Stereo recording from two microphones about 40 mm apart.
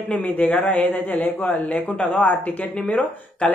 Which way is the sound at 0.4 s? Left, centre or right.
Left.